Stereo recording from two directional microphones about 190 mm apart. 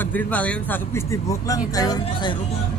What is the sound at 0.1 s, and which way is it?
Speech, 5° left (ahead or behind).